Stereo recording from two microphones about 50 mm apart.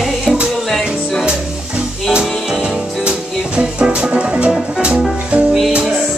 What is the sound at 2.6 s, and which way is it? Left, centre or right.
Music, right.